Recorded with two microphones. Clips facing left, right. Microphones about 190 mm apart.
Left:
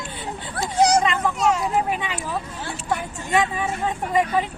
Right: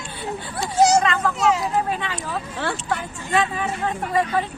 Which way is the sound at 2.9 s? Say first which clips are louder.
Left 5 dB; 15° left (ahead or behind).